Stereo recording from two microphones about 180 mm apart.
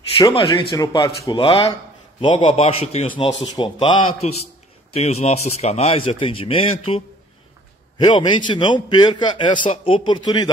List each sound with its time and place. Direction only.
0.2 s a man's voice: 20° left (ahead or behind)
8.0 s a man's voice: 25° left (ahead or behind)